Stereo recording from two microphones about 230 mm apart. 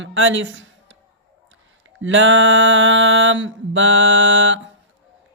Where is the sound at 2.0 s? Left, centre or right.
Right.